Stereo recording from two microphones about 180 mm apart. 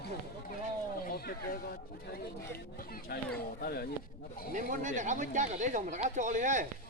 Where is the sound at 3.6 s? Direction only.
60° left (ahead or behind).